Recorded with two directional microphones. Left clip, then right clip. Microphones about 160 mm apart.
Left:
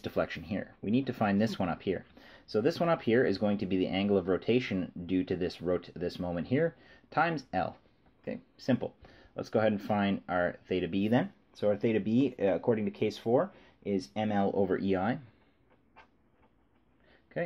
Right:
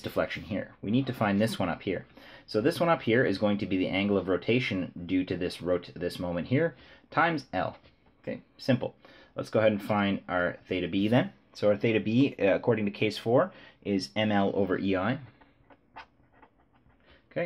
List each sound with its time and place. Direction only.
0.0 s speech: 30° left (ahead or behind)